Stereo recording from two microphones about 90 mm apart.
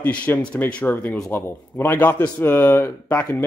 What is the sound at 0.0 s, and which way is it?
Speech, 20° left (ahead or behind).